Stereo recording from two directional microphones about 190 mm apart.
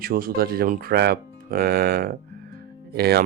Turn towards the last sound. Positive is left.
turn(degrees=-55)  # may be behind; listen again after turning